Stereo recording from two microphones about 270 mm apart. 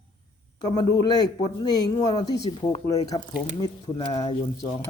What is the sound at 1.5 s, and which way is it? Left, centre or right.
Speech, centre.